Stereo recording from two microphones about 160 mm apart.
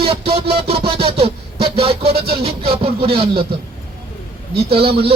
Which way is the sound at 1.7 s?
35° right (ahead or behind).